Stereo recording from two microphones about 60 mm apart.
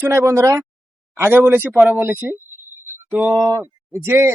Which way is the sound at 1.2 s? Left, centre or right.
Right.